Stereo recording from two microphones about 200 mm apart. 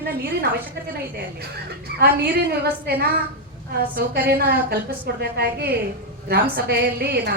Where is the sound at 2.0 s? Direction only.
50° right (ahead or behind).